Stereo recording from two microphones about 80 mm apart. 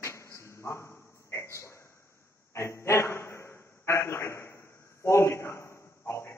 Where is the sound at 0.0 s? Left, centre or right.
Left.